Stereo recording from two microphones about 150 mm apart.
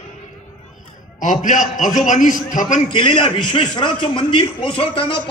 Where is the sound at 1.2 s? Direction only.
55° left (ahead or behind).